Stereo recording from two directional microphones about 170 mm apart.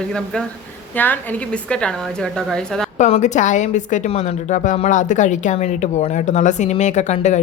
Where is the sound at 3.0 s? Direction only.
40° left (ahead or behind).